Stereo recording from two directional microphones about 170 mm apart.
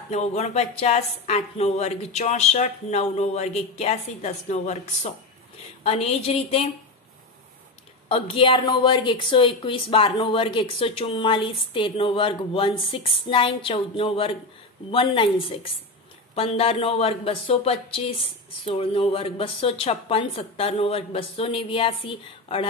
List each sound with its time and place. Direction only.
0.1 s a woman's voice: 40° left (ahead or behind)
8.1 s a woman's voice: 30° left (ahead or behind)